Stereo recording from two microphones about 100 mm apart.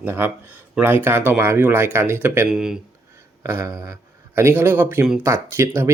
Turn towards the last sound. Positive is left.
turn(degrees=-25)  # may be behind; listen again after turning